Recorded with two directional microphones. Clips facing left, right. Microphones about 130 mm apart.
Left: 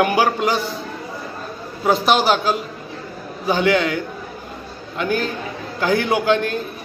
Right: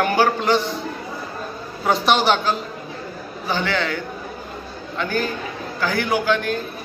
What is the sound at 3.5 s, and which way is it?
Speech, 15° left (ahead or behind).